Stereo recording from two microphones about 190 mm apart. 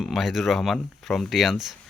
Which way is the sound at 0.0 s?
Centre (ahead or behind).